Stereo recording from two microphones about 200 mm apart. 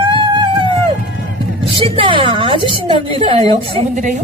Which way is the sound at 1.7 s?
25° right (ahead or behind).